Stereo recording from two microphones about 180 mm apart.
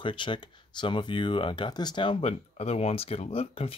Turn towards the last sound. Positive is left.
turn(degrees=30)  # may be behind; listen again after turning